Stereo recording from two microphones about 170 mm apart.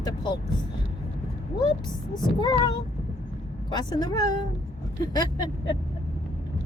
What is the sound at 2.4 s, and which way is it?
A woman's voice, 25° left (ahead or behind).